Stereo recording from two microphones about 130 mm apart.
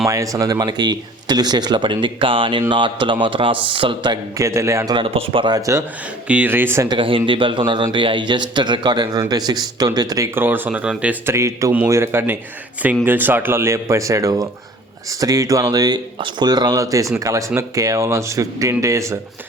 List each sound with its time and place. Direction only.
0.1 s speech: 25° right (ahead or behind)
4.4 s speech: 20° right (ahead or behind)
4.9 s speech: 45° right (ahead or behind)
5.5 s speech: 25° right (ahead or behind)
6.2 s speech: 10° right (ahead or behind)
6.8 s speech: 40° right (ahead or behind)
10.3 s speech: 15° right (ahead or behind)